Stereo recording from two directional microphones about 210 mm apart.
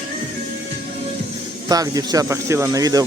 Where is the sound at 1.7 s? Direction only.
15° right (ahead or behind).